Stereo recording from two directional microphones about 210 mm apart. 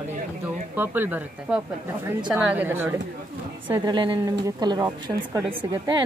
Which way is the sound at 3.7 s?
20° right (ahead or behind).